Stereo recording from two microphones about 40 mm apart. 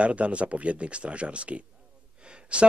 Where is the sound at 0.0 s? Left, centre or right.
Right.